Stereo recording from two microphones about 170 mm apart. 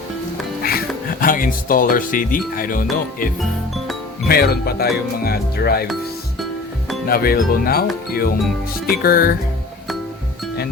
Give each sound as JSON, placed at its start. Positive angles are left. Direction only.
{"t": 0.6, "sound": "speech", "side_deg": 60}
{"t": 4.3, "sound": "speech", "side_deg": 65}
{"t": 7.1, "sound": "speech", "side_deg": 60}